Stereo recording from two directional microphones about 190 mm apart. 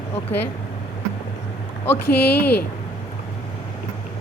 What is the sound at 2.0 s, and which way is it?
Speech, 55° left (ahead or behind).